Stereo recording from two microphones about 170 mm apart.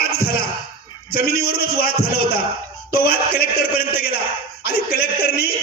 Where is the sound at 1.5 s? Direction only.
65° left (ahead or behind).